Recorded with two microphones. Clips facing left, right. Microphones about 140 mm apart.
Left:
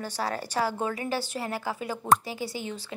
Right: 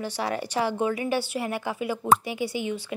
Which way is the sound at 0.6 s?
20° right (ahead or behind).